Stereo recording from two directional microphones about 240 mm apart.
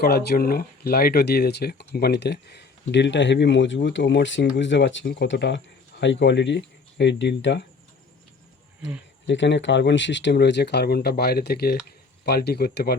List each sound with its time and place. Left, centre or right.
0.0 s speech: left
9.2 s speech: left